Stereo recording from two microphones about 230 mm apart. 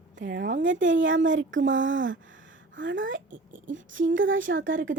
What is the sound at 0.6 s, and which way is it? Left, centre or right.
A woman's voice, right.